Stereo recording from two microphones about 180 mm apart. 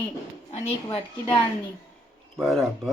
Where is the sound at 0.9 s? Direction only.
30° left (ahead or behind).